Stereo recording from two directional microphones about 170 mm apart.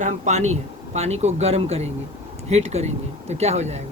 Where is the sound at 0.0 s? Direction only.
45° right (ahead or behind).